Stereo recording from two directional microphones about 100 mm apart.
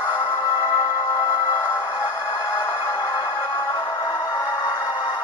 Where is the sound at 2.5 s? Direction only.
20° left (ahead or behind).